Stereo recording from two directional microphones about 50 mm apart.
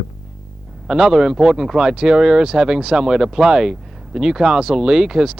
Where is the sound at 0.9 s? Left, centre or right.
Centre.